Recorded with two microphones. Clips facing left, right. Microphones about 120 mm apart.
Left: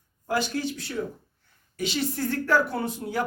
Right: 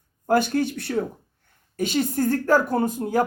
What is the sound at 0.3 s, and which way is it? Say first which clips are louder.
A woman's voice: right 7 dB; 55° right (ahead or behind).